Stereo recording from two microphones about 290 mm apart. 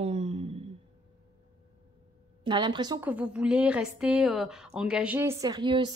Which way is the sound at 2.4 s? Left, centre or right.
Centre.